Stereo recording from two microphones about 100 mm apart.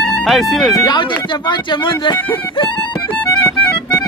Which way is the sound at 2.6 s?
60° left (ahead or behind).